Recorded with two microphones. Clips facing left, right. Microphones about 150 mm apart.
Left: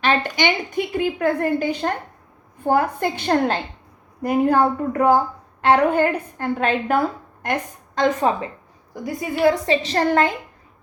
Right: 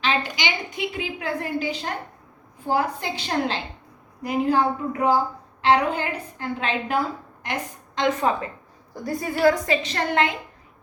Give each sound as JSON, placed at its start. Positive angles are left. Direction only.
{"t": 0.0, "sound": "a woman's voice", "side_deg": 55}
{"t": 9.0, "sound": "a woman's voice", "side_deg": 15}
{"t": 9.8, "sound": "a woman's voice", "side_deg": 40}